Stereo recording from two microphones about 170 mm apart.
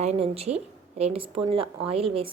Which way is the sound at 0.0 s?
40° right (ahead or behind).